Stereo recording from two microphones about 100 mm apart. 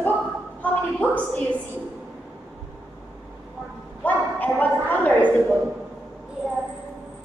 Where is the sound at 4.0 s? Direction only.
15° left (ahead or behind).